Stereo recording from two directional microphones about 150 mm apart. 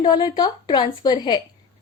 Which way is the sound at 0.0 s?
30° left (ahead or behind).